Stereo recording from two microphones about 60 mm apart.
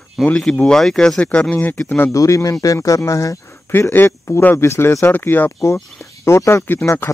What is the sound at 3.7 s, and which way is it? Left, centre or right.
Speech, left.